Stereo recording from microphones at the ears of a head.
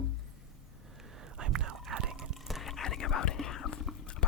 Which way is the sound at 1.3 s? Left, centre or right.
Right.